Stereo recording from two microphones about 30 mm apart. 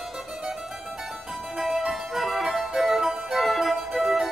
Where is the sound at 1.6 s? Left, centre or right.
Centre.